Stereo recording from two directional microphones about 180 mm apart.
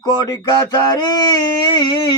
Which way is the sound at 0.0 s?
20° left (ahead or behind).